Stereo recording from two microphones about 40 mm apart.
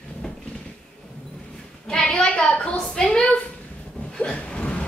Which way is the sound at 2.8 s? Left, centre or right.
Centre.